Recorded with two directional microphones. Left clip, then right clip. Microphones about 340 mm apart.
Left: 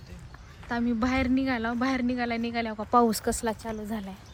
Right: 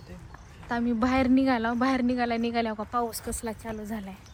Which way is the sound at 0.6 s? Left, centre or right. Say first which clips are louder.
Right 1 dB; centre.